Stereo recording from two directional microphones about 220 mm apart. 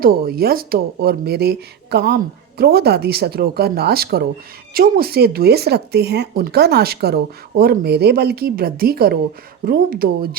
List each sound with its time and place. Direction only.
0.0 s speech: 45° right (ahead or behind)